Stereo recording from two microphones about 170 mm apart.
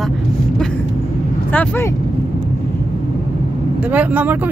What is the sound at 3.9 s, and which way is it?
Speech, 10° right (ahead or behind).